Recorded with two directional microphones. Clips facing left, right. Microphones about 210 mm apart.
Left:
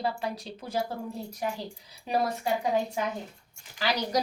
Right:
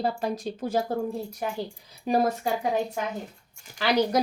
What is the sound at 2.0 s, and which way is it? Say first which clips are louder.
Speech: right 4 dB; 45° right (ahead or behind).